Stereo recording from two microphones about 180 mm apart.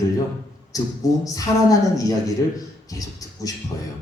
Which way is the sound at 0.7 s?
20° left (ahead or behind).